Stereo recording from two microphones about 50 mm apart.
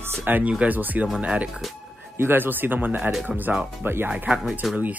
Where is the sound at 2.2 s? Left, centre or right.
Right.